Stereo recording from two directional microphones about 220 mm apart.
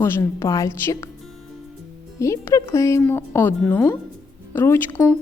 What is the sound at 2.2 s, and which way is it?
A woman's voice, 15° left (ahead or behind).